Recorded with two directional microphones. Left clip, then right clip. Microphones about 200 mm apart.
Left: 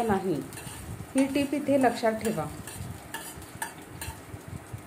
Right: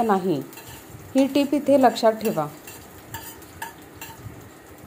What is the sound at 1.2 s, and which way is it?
A woman's voice, 40° right (ahead or behind).